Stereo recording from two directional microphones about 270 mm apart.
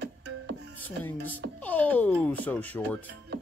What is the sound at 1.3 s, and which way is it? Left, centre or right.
Speech, centre.